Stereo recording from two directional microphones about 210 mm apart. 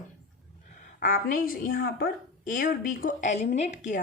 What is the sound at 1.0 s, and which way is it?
A woman's voice, 40° left (ahead or behind).